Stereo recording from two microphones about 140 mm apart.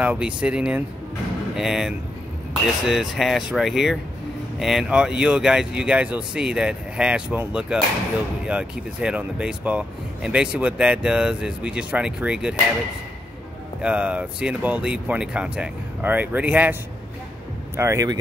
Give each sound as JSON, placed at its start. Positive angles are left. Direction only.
{"t": 0.0, "sound": "speech", "side_deg": -10}
{"t": 13.7, "sound": "speech", "side_deg": -10}
{"t": 17.7, "sound": "speech", "side_deg": -20}